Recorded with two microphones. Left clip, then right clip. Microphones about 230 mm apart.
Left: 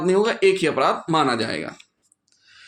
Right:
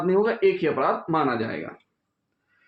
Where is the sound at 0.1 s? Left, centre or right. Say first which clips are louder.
Left 3 dB; left.